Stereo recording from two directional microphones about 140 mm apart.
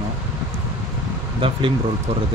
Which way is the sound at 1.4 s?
40° right (ahead or behind).